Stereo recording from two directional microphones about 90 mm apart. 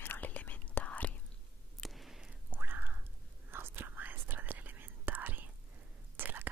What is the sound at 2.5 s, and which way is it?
Whispering, 20° right (ahead or behind).